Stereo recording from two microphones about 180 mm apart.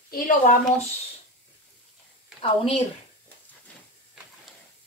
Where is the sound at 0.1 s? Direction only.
50° left (ahead or behind).